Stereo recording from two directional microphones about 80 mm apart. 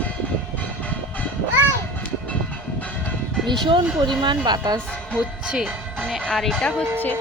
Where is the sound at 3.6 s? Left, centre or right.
Right.